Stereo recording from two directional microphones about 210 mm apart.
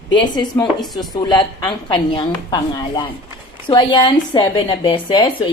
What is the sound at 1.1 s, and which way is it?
A woman's voice, 20° left (ahead or behind).